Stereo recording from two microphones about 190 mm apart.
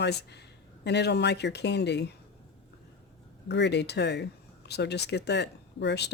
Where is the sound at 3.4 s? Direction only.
65° left (ahead or behind).